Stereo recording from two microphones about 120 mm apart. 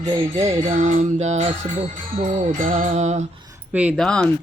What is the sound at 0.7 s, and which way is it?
Music, 80° right.